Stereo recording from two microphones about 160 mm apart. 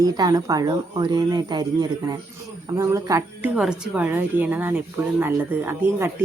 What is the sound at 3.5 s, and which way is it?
Speech, 5° right (ahead or behind).